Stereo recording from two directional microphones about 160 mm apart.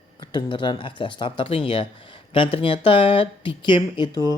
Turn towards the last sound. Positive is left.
turn(degrees=25)  # may be behind; listen again after turning